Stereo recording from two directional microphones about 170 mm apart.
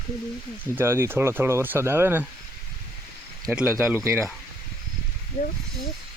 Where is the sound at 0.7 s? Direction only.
15° right (ahead or behind).